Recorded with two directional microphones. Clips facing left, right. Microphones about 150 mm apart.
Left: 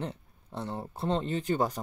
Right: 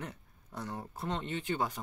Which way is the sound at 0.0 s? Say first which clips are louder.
Left 7 dB; 30° left (ahead or behind).